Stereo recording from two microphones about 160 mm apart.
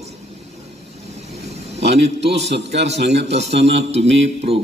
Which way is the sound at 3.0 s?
90° right.